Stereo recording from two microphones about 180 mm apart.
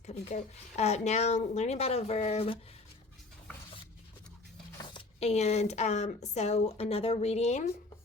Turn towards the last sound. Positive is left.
turn(degrees=40)  # may be behind; listen again after turning